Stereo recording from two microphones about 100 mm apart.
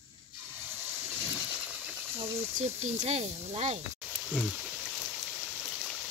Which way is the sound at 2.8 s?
90° right.